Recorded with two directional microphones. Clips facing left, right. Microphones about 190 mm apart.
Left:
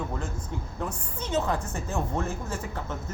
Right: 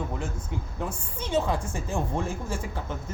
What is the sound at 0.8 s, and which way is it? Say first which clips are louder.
A woman's voice: even; 10° right (ahead or behind).